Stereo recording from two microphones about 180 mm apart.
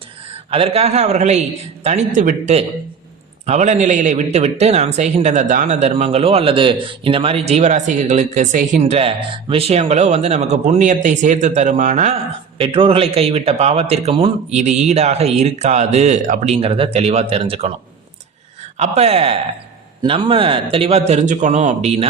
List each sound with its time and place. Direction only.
0.5 s speech: 30° right (ahead or behind)
12.5 s speech: 30° right (ahead or behind); by 16.6 s 45° right (ahead or behind)
16.6 s speech: 30° right (ahead or behind)
18.8 s speech: 35° right (ahead or behind)